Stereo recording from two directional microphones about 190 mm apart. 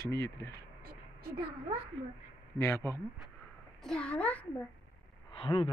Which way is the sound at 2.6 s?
15° left (ahead or behind).